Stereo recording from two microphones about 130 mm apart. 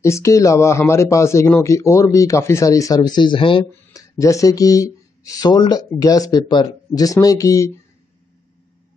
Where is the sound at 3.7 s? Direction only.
25° left (ahead or behind).